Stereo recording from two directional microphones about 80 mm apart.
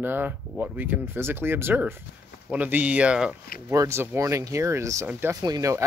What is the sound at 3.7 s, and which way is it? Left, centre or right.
Speech, right.